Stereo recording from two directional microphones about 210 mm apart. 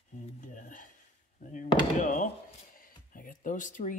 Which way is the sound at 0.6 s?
40° left (ahead or behind).